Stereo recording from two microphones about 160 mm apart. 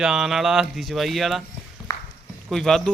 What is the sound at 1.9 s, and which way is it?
Walk, 20° left (ahead or behind).